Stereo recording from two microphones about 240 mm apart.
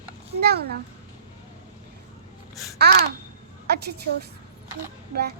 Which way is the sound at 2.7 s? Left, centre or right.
Right.